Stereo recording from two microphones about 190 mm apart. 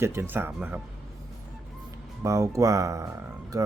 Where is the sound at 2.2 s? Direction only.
15° right (ahead or behind).